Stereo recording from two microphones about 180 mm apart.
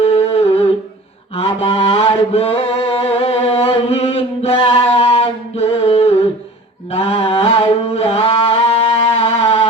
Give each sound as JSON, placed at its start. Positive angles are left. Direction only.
{"t": 0.0, "sound": "humming", "side_deg": 35}
{"t": 1.4, "sound": "chant", "side_deg": 35}
{"t": 6.9, "sound": "mantra", "side_deg": 35}
{"t": 9.2, "sound": "music", "side_deg": 30}